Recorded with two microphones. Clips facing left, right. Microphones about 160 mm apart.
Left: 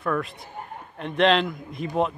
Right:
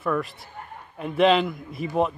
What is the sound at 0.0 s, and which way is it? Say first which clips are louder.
Speech: right 1 dB; centre (ahead or behind).